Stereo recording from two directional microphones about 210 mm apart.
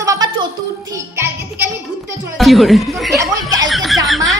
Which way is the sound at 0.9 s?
15° right (ahead or behind).